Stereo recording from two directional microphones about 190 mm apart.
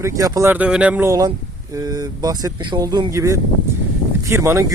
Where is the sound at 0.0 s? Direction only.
15° right (ahead or behind).